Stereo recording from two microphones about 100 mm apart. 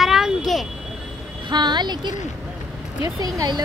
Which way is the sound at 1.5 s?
45° right (ahead or behind).